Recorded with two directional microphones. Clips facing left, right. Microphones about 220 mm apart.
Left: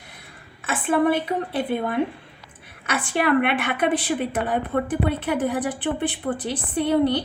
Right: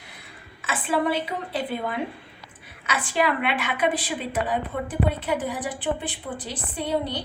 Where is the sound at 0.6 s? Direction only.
55° left (ahead or behind).